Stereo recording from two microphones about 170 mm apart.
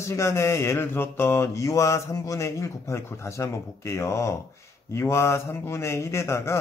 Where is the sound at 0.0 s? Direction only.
15° left (ahead or behind).